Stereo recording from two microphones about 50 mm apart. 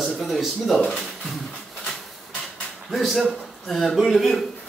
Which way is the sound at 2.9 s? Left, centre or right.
Centre.